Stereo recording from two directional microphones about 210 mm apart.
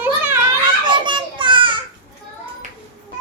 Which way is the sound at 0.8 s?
20° right (ahead or behind).